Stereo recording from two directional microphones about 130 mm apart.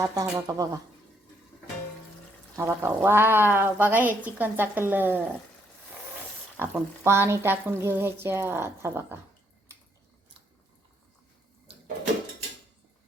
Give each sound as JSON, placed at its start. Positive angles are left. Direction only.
{"t": 0.0, "sound": "speech", "side_deg": -25}
{"t": 2.6, "sound": "speech", "side_deg": -20}
{"t": 6.6, "sound": "speech", "side_deg": -20}